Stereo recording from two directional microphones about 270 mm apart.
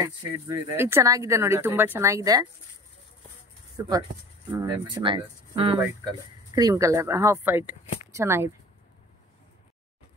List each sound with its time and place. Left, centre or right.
0.0 s speech: centre
4.5 s speech: centre